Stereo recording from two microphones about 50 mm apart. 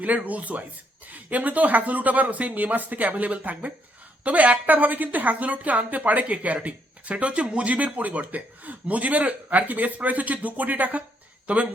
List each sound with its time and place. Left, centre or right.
0.3 s a man's voice: right